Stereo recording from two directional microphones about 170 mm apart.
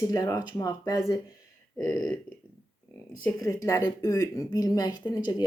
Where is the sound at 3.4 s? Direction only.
20° left (ahead or behind).